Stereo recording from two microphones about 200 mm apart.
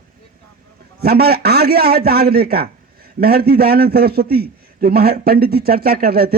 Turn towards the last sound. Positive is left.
turn(degrees=-50)  # may be behind; listen again after turning